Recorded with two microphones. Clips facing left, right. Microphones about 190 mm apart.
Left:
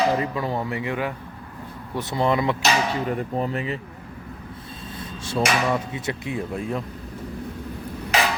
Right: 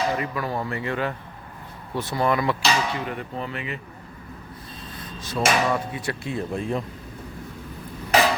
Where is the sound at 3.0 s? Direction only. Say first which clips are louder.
Left 6 dB; 40° left (ahead or behind).